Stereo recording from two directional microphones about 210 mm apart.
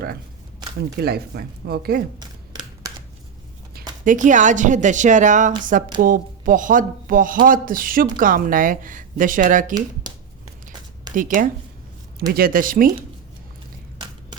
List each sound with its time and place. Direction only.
0.9 s speech: 50° right (ahead or behind)
2.2 s a sound: 20° right (ahead or behind)
4.0 s speech: 40° right (ahead or behind)
11.1 s speech: 40° right (ahead or behind)